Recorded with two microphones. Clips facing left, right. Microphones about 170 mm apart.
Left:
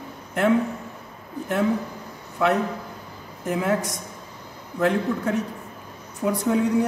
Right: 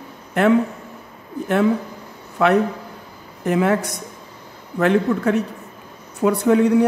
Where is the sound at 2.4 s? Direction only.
75° right (ahead or behind).